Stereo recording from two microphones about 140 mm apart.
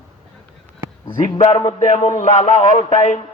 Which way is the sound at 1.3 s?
50° left (ahead or behind).